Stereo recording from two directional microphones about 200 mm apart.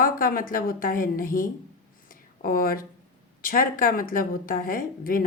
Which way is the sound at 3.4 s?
45° left (ahead or behind).